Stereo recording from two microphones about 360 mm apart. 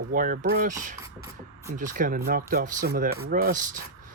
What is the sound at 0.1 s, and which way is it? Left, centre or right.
Speech, right.